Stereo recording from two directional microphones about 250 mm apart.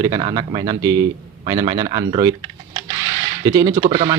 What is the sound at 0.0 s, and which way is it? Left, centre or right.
Speech, centre.